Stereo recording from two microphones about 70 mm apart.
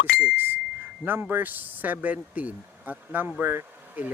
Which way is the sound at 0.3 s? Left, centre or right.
Right.